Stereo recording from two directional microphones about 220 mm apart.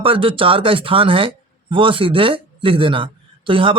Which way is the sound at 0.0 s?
25° right (ahead or behind).